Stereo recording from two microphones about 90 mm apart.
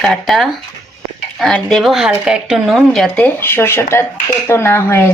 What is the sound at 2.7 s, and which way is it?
Speech, 5° left (ahead or behind).